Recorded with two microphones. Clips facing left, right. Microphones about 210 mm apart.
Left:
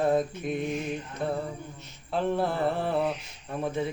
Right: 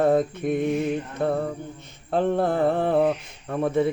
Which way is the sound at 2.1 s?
50° right (ahead or behind).